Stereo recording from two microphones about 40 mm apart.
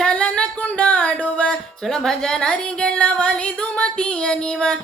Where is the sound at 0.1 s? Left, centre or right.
Left.